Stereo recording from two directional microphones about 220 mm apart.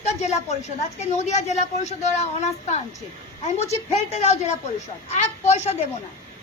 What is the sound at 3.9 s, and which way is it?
A woman's voice, 30° left (ahead or behind).